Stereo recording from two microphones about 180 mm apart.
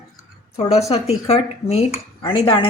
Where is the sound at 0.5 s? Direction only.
35° left (ahead or behind).